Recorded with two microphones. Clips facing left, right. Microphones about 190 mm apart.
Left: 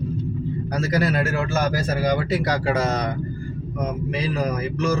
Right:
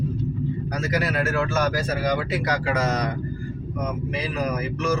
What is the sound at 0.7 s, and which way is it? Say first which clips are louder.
Speech: left 4 dB; 30° left (ahead or behind).